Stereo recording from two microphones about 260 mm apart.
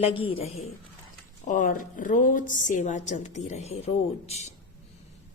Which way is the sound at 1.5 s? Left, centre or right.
Left.